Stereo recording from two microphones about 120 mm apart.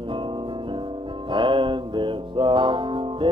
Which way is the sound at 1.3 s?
45° right (ahead or behind).